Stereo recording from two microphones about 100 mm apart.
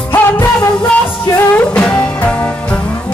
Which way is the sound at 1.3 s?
15° left (ahead or behind).